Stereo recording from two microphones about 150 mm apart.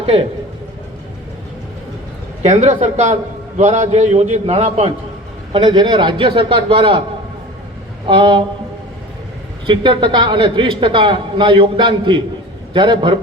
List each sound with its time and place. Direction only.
0.0 s a man's voice: 40° right (ahead or behind)
2.4 s a man's voice: 55° right (ahead or behind)
5.5 s a man's voice: 30° right (ahead or behind)
8.0 s a man's voice: 35° right (ahead or behind)
9.6 s a man's voice: 35° right (ahead or behind)